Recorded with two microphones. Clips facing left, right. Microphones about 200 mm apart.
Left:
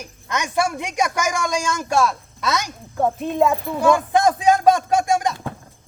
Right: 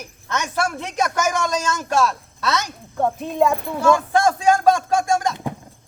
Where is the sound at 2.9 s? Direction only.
Centre (ahead or behind).